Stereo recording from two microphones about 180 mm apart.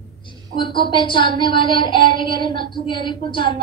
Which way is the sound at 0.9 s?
25° left (ahead or behind).